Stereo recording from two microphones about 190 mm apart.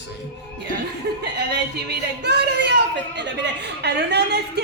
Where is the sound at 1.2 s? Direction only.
65° right (ahead or behind).